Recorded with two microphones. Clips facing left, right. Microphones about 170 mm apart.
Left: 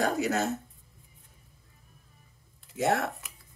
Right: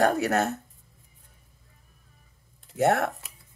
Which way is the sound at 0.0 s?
60° right (ahead or behind).